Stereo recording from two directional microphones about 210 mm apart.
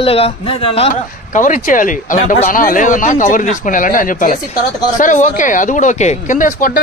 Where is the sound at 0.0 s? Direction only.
25° left (ahead or behind).